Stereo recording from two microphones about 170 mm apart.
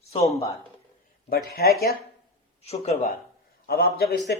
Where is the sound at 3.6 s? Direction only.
65° left (ahead or behind).